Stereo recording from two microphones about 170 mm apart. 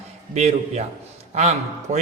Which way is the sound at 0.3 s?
40° right (ahead or behind).